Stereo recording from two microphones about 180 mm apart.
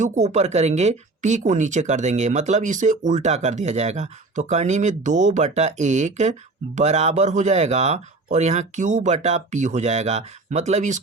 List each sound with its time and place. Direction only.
0.0 s speech: 40° right (ahead or behind)